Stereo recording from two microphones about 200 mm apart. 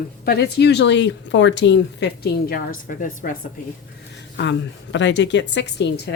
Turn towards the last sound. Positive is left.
turn(degrees=60)  # may be behind; listen again after turning